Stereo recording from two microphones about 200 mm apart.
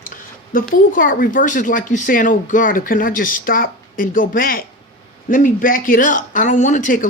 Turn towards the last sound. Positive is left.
turn(degrees=40)  # may be behind; listen again after turning